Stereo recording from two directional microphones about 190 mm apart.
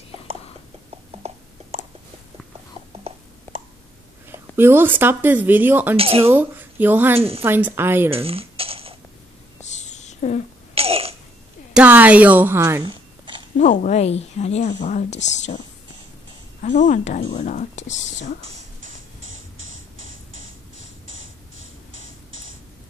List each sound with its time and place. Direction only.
1.2 s a sound: 35° right (ahead or behind)
4.3 s speech: 10° right (ahead or behind)
5.9 s speech: 30° right (ahead or behind)
6.3 s speech: 10° right (ahead or behind)
7.2 s speech: 30° right (ahead or behind)
7.4 s speech: 10° right (ahead or behind)
8.1 s a sound: 30° right (ahead or behind)
9.7 s a sound: 40° left (ahead or behind)
10.7 s a sound: 30° right (ahead or behind)
11.7 s speech: 10° right (ahead or behind)
13.6 s speech: 40° left (ahead or behind)
16.6 s speech: 40° left (ahead or behind)
18.4 s music: 30° right (ahead or behind)
18.9 s music: 90° right